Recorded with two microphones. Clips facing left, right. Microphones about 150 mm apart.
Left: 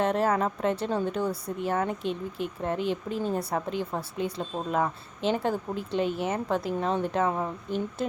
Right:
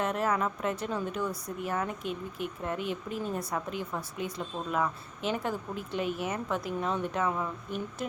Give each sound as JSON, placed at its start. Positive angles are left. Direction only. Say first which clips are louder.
{"t": 0.0, "sound": "speech", "louder": "left 4 dB", "side_deg": 30}